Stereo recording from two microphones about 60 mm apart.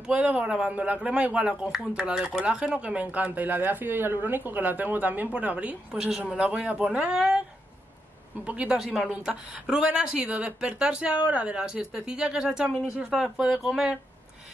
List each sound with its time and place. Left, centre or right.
0.0 s speech: centre
1.5 s speech: centre; by 5.8 s right
5.9 s speech: centre
8.5 s speech: right
8.7 s a woman's voice: centre
9.1 s speech: centre